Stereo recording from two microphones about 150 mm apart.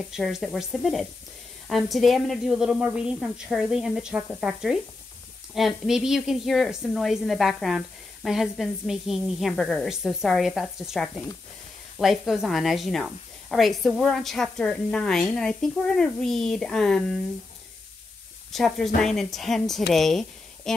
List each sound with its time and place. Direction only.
0.1 s speech: centre (ahead or behind)
18.5 s speech: centre (ahead or behind)